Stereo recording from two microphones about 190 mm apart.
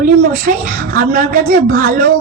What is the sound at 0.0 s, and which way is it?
A woman's voice, 45° right (ahead or behind).